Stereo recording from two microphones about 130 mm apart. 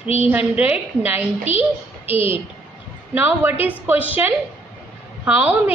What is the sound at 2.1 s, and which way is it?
Speech, 45° left (ahead or behind).